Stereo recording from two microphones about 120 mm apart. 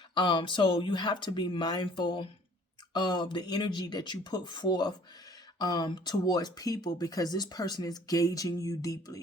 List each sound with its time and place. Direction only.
0.1 s speech: 40° left (ahead or behind)